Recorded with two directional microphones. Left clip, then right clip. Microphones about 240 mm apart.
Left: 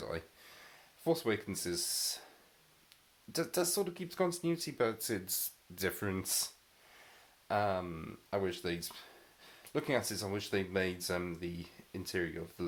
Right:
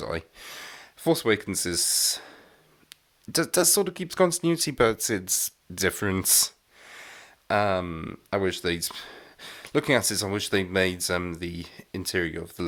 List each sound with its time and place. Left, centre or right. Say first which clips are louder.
0.0 s speech: right 10 dB; right